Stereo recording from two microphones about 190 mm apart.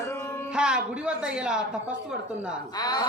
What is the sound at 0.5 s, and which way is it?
Speech, 5° right (ahead or behind).